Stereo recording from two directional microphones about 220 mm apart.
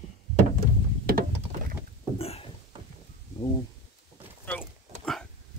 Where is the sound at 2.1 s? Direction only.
25° left (ahead or behind).